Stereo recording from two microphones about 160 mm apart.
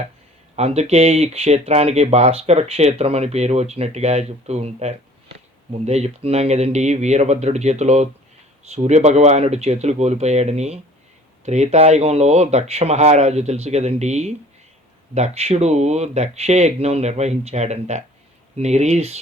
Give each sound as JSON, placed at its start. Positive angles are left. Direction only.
{"t": 0.5, "sound": "speech", "side_deg": -40}